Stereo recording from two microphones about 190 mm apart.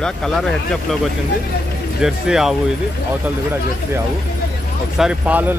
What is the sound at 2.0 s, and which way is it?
Speech, 5° right (ahead or behind).